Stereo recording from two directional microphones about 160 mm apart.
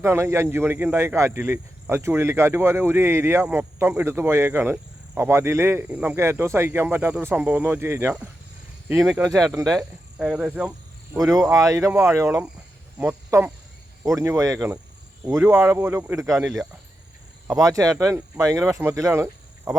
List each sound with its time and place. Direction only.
0.0 s speech: 15° right (ahead or behind)
9.0 s speech: 5° right (ahead or behind)
9.6 s speech: 20° right (ahead or behind)
10.2 s speech: 5° right (ahead or behind)
11.3 s speech: 20° right (ahead or behind)
16.4 s speech: centre (ahead or behind)
17.5 s speech: 20° right (ahead or behind)